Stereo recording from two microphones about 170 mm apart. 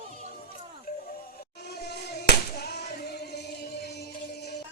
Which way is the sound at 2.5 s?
75° left (ahead or behind).